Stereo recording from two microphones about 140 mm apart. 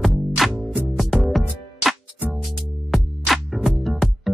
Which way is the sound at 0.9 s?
Centre (ahead or behind).